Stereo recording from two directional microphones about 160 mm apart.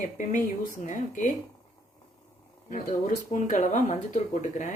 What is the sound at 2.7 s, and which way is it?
Speech, 50° left (ahead or behind).